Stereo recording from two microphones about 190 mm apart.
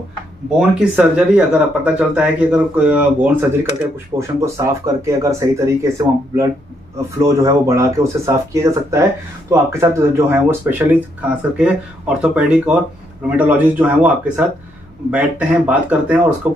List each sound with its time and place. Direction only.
0.6 s speech: 5° right (ahead or behind)
16.5 s speech: 40° right (ahead or behind)